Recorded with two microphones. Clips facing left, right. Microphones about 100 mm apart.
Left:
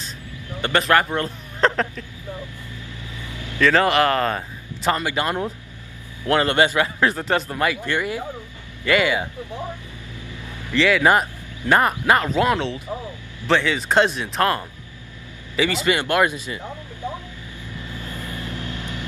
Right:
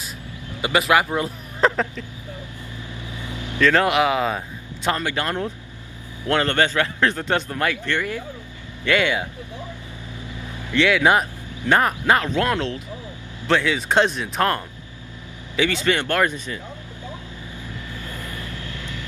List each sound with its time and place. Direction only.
0.6 s a man's voice: 10° right (ahead or behind)
3.2 s vehicle: 20° right (ahead or behind)
3.6 s a man's voice: centre (ahead or behind)
10.7 s a man's voice: centre (ahead or behind)
17.9 s vehicle: 20° left (ahead or behind)